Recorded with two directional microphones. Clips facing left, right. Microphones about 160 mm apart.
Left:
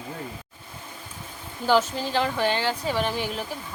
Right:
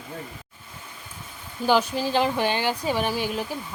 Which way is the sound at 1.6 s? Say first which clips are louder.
Right 1 dB; 15° right (ahead or behind).